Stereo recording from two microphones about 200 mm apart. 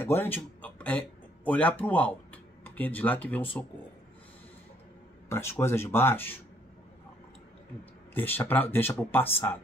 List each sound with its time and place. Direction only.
0.0 s speech: 10° left (ahead or behind)
5.3 s speech: 10° left (ahead or behind)
8.1 s speech: 10° left (ahead or behind)